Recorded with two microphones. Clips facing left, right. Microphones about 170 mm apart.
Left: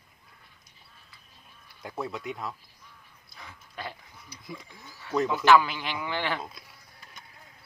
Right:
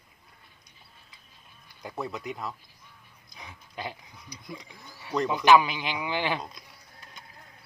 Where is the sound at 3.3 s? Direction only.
15° right (ahead or behind).